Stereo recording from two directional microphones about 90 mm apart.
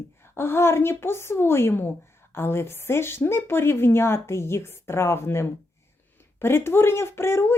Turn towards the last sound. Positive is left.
turn(degrees=30)  # may be behind; listen again after turning